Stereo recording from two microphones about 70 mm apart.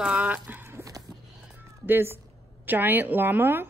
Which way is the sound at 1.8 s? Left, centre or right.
Right.